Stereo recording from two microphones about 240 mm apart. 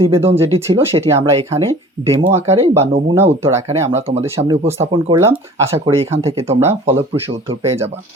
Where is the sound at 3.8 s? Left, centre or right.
Right.